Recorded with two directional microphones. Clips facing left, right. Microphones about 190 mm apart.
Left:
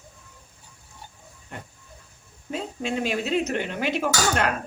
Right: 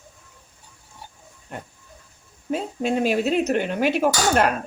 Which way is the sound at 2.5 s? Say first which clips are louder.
Right 5 dB; 45° right (ahead or behind).